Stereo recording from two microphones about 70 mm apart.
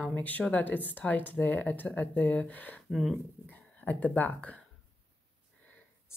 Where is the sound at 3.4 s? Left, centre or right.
Left.